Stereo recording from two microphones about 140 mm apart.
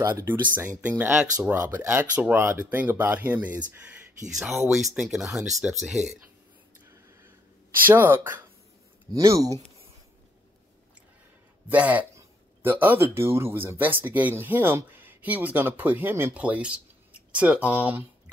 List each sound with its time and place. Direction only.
0.3 s speech: 15° right (ahead or behind)
7.8 s speech: 15° right (ahead or behind)
11.7 s speech: 10° right (ahead or behind)